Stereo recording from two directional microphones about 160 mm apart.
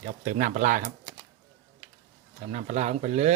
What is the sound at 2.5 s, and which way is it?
Speech, 50° right (ahead or behind).